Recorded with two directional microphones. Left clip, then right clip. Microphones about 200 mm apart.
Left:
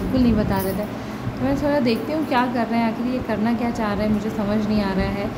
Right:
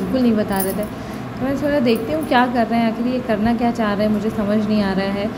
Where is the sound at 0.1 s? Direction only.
5° right (ahead or behind).